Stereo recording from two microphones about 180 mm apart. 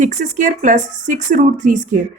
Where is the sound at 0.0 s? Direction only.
45° right (ahead or behind).